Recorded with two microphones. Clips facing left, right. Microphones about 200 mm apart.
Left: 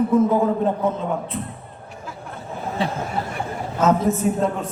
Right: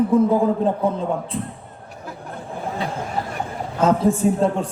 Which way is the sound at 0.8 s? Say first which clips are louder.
Right 1 dB; 30° right (ahead or behind).